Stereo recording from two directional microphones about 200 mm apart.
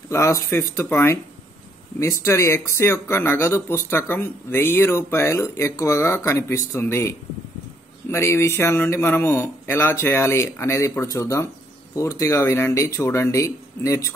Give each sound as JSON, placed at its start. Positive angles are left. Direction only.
{"t": 0.1, "sound": "speech", "side_deg": 15}